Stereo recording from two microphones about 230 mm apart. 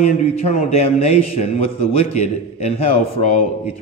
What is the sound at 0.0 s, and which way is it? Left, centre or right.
A man's voice, left.